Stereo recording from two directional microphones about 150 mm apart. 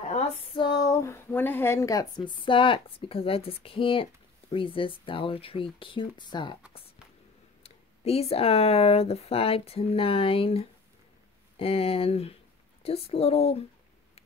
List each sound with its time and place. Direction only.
0.1 s speech: 35° left (ahead or behind)
7.6 s speech: 40° left (ahead or behind)